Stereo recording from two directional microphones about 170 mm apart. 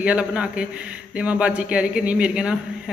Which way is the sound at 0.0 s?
5° right (ahead or behind).